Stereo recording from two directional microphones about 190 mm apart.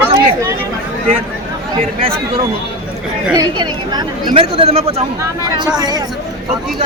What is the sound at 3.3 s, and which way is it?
Speech, 20° right (ahead or behind).